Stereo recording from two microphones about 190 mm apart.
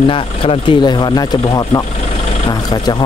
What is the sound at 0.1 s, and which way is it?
Speech, 25° left (ahead or behind).